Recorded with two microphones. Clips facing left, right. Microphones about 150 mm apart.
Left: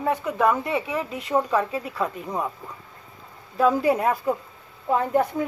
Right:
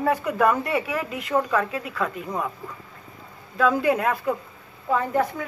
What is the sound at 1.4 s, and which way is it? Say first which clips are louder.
Speech: left 1 dB; 15° left (ahead or behind).